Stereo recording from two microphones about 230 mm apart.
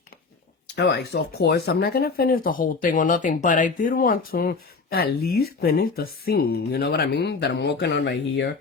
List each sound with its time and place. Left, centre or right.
0.8 s speech: left